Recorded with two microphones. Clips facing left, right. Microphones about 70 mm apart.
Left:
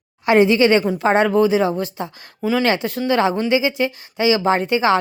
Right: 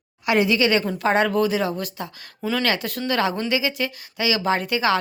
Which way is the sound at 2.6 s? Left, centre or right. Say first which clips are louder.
Left 5 dB; left.